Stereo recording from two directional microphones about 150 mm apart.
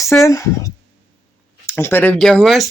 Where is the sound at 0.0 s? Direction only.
20° left (ahead or behind).